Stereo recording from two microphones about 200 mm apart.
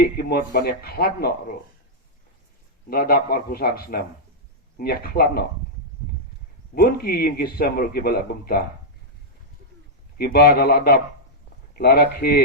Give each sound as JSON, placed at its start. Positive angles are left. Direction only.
{"t": 0.0, "sound": "a man's voice", "side_deg": 50}
{"t": 2.9, "sound": "a man's voice", "side_deg": 50}
{"t": 6.7, "sound": "a man's voice", "side_deg": 50}
{"t": 10.2, "sound": "a man's voice", "side_deg": 50}